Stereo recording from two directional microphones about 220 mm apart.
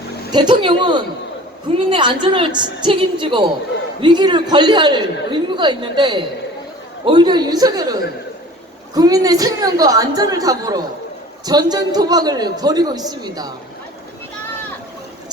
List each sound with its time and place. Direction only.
0.3 s a man's voice: 20° right (ahead or behind)
9.0 s a man's voice: 15° right (ahead or behind)